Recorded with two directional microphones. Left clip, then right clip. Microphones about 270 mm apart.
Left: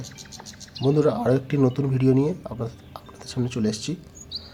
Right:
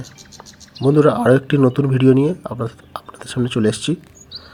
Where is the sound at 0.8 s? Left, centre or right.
Centre.